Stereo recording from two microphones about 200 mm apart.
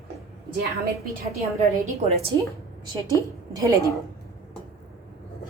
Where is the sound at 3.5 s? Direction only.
15° right (ahead or behind).